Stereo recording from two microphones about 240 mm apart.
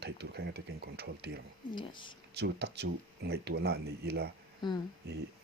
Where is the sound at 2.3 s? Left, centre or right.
Right.